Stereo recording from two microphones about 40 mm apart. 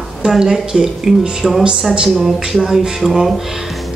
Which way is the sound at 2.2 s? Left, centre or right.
Centre.